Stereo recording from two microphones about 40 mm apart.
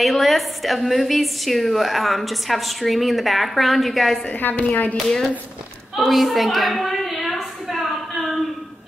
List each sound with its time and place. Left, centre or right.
0.0 s a woman's voice: centre
4.3 s a woman's voice: left
4.9 s speech: centre
5.9 s a sound: centre